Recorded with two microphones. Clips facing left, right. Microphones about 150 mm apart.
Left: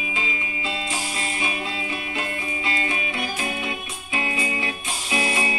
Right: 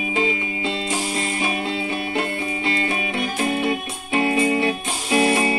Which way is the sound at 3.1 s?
55° right (ahead or behind).